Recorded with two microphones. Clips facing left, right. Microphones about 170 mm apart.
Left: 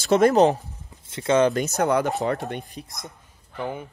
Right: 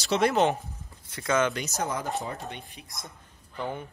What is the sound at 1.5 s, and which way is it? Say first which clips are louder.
Speech: left 10 dB; 60° left (ahead or behind).